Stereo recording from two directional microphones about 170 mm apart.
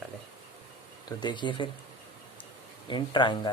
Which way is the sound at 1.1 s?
25° left (ahead or behind).